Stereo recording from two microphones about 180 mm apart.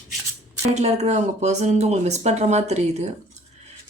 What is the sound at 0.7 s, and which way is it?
Speech, 40° right (ahead or behind).